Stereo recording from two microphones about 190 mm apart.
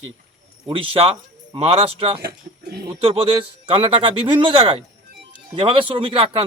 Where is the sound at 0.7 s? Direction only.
30° right (ahead or behind).